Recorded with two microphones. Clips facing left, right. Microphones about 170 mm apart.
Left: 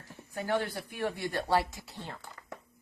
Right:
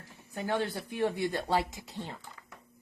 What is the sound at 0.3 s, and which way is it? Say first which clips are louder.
Speech: even; 25° right (ahead or behind).